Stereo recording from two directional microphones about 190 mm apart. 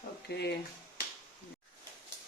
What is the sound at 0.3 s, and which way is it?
Speech, 60° left (ahead or behind).